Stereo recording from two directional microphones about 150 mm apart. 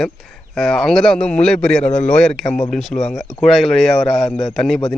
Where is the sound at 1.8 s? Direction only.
50° left (ahead or behind).